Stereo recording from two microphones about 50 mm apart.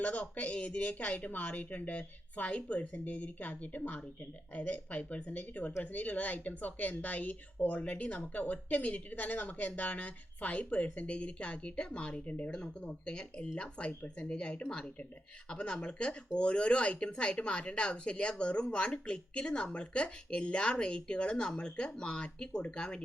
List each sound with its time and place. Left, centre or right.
0.0 s a woman's voice: left